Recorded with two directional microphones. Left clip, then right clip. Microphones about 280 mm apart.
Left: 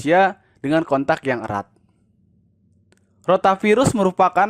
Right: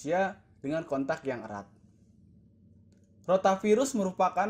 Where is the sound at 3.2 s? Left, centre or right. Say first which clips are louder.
Left 9 dB; left.